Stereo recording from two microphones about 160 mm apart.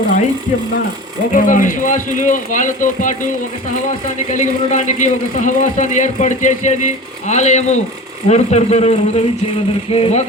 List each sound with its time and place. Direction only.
1.3 s speech: 55° left (ahead or behind)
4.3 s speech: 45° left (ahead or behind)